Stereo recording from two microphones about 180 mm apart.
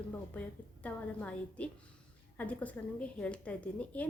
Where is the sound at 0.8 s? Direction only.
10° left (ahead or behind).